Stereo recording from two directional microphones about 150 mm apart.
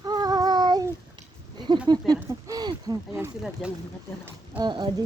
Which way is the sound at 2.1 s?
25° right (ahead or behind).